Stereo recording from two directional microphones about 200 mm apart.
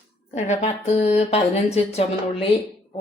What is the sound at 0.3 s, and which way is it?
Speech, 35° left (ahead or behind).